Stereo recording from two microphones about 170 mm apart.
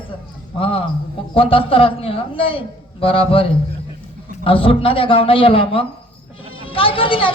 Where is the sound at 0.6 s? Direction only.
30° left (ahead or behind).